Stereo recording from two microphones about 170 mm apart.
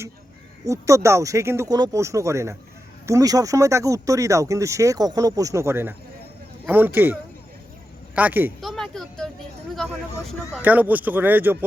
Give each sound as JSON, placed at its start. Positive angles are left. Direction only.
{"t": 0.6, "sound": "speech", "side_deg": -20}
{"t": 8.6, "sound": "speech", "side_deg": 0}
{"t": 10.6, "sound": "speech", "side_deg": -10}